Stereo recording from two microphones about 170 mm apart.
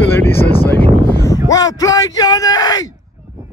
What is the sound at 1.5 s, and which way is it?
Speech, 20° left (ahead or behind).